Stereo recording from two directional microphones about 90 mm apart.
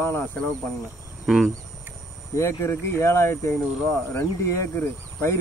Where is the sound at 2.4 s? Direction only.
30° left (ahead or behind).